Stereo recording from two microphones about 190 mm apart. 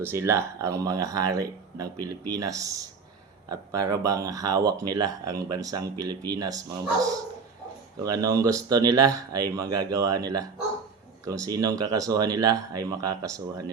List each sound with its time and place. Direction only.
0.0 s speech: 15° right (ahead or behind)